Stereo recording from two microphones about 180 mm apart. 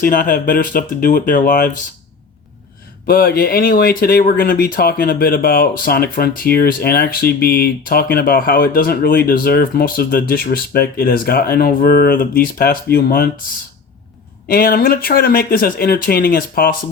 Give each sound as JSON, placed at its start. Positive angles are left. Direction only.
{"t": 0.0, "sound": "speech", "side_deg": 50}
{"t": 3.1, "sound": "speech", "side_deg": 55}
{"t": 14.4, "sound": "speech", "side_deg": 55}